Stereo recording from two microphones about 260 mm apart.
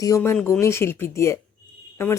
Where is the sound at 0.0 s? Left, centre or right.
Centre.